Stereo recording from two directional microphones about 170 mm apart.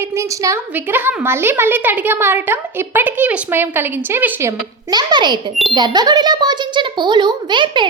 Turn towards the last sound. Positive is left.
turn(degrees=-25)  # may be behind; listen again after turning